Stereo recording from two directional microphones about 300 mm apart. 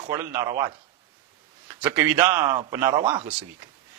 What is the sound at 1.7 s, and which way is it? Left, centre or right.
A man's voice, centre.